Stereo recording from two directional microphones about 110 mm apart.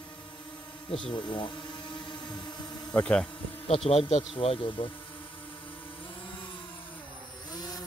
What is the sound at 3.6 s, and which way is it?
Speech, 65° left (ahead or behind).